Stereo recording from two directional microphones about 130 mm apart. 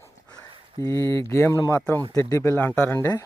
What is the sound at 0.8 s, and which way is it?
Speech, 25° left (ahead or behind).